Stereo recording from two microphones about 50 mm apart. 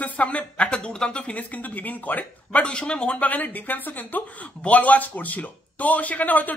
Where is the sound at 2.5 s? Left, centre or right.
Left.